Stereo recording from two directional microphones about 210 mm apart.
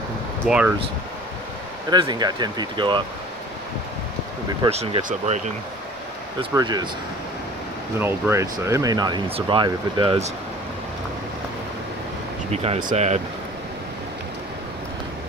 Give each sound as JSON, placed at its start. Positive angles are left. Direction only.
{"t": 0.5, "sound": "speech", "side_deg": -5}
{"t": 1.9, "sound": "speech", "side_deg": -20}
{"t": 4.6, "sound": "speech", "side_deg": -30}
{"t": 6.5, "sound": "speech", "side_deg": -20}
{"t": 8.0, "sound": "speech", "side_deg": -15}
{"t": 12.4, "sound": "speech", "side_deg": -30}